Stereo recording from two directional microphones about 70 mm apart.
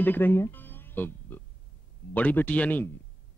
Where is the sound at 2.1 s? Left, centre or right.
Left.